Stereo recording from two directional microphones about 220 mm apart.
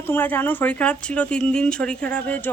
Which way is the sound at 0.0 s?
10° left (ahead or behind).